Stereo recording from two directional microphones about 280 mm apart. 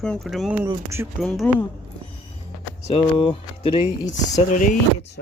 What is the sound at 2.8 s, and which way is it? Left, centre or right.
Speech, centre.